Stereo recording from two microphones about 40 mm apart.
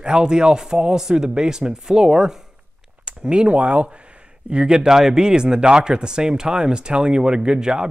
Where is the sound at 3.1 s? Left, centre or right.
Right.